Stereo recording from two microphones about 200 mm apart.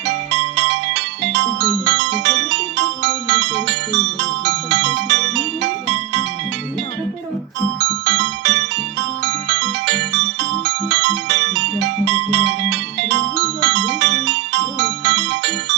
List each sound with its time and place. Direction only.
0.0 s music: 60° right (ahead or behind)
7.8 s music: 65° right (ahead or behind)
9.8 s music: 65° right (ahead or behind)